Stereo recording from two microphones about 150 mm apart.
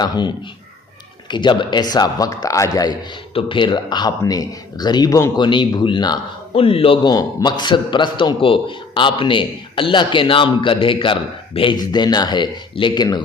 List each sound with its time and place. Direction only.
0.0 s a man's voice: 30° left (ahead or behind)
3.3 s speech: 35° left (ahead or behind)